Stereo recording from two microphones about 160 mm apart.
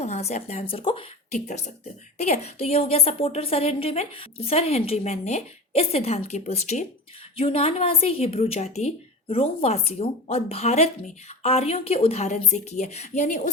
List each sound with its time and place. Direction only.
0.0 s a woman's voice: 40° left (ahead or behind)